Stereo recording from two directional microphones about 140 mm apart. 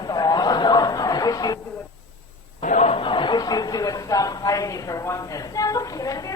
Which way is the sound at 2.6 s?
55° left (ahead or behind).